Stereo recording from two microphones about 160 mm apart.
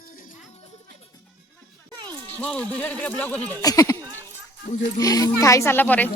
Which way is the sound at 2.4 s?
10° left (ahead or behind).